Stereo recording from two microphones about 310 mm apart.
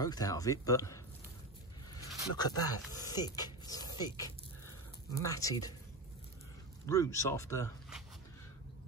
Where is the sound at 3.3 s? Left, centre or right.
Centre.